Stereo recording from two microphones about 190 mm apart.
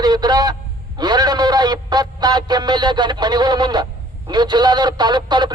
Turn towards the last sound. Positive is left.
turn(degrees=-20)  # may be behind; listen again after turning